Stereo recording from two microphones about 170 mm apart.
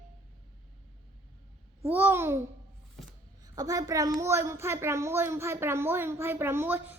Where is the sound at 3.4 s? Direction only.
20° right (ahead or behind).